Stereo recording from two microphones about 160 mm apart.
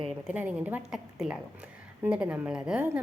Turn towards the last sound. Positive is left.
turn(degrees=-5)  # may be behind; listen again after turning